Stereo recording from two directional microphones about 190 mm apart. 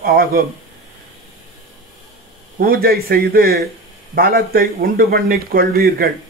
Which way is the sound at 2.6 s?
50° right (ahead or behind).